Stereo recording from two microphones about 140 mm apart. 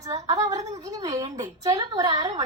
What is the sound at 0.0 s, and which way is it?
A woman's voice, 25° right (ahead or behind).